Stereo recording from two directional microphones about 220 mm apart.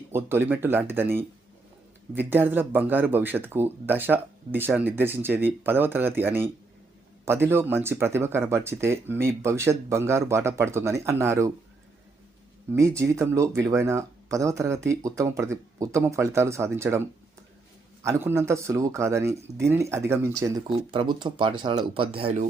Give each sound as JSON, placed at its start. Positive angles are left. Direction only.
{"t": 0.1, "sound": "speech", "side_deg": -10}
{"t": 12.7, "sound": "speech", "side_deg": -15}
{"t": 18.0, "sound": "speech", "side_deg": -10}